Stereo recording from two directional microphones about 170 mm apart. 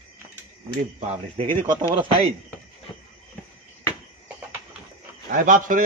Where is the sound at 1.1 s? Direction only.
40° right (ahead or behind).